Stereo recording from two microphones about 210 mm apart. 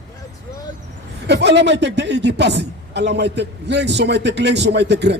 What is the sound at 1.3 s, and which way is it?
A man's voice, 55° right (ahead or behind).